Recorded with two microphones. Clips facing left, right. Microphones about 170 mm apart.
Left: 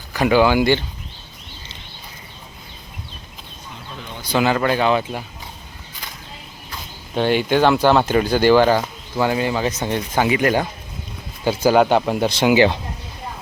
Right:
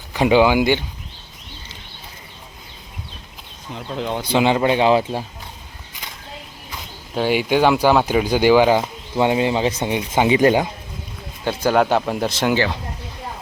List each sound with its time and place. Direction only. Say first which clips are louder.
0.1 s speech: right 1 dB; 20° right (ahead or behind)
3.8 s speech: right 12 dB; 75° right (ahead or behind)
4.2 s speech: right 1 dB; 25° right (ahead or behind)
7.1 s speech: left 1 dB; 5° right (ahead or behind); by 10.5 s 25° right (ahead or behind)
11.4 s speech: left 2 dB; centre (ahead or behind)